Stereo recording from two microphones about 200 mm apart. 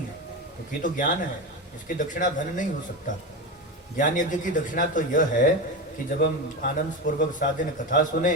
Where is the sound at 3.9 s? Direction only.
40° left (ahead or behind).